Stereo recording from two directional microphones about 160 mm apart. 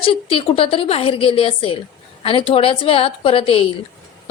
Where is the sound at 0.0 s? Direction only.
35° left (ahead or behind).